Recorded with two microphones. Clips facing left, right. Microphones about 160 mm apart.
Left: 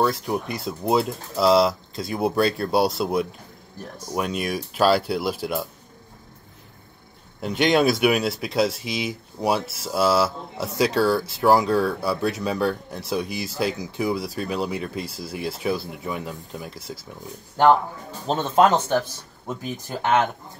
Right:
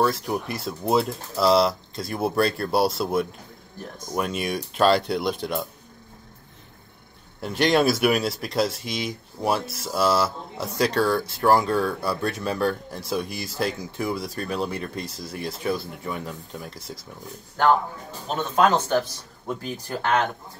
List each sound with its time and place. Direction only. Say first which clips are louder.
0.0 s speech: left 1 dB; centre (ahead or behind)
7.4 s speech: left 1 dB; centre (ahead or behind)
18.2 s speech: left 3 dB; 30° left (ahead or behind)
19.9 s speech: left 2 dB; 20° left (ahead or behind)